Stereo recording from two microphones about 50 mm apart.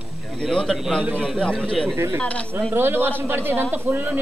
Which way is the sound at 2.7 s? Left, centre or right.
Right.